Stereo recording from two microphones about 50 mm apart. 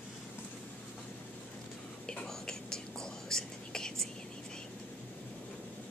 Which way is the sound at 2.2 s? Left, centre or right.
Centre.